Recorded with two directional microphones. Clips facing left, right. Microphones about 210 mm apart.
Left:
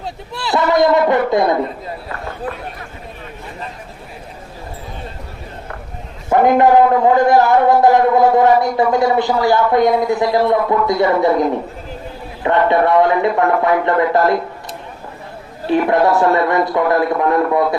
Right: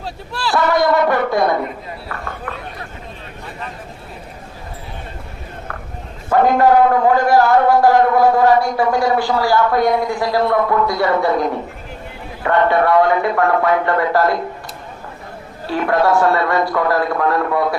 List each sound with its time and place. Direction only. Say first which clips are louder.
0.0 s a man's voice: right 1 dB; 20° left (ahead or behind)
6.3 s a man's voice: left 2 dB; 20° left (ahead or behind)
15.6 s a man's voice: left 3 dB; 20° left (ahead or behind)